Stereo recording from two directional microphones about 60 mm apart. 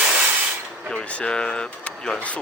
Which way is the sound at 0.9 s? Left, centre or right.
Centre.